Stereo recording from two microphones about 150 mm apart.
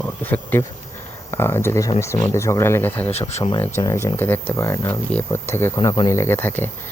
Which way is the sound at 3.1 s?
45° left (ahead or behind).